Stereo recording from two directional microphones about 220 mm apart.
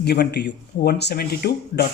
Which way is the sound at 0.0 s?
50° left (ahead or behind).